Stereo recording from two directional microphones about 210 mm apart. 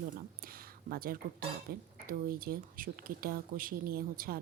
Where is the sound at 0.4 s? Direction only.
45° right (ahead or behind).